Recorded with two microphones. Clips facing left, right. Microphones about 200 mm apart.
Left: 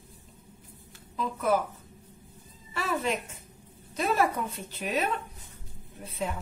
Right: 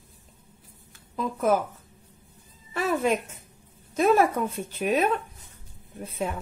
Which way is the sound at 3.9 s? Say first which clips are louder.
Right 6 dB; 50° right (ahead or behind).